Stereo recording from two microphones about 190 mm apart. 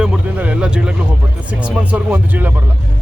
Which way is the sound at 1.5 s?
5° right (ahead or behind).